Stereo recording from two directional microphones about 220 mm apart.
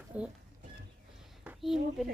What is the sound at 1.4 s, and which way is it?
Speech, centre (ahead or behind).